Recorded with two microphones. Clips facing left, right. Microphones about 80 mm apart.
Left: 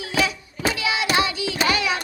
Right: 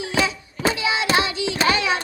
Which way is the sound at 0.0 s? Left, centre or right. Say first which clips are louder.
Right 1 dB; right.